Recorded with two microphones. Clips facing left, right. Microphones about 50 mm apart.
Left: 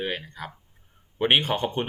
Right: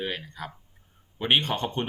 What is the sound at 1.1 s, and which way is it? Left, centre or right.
Speech, left.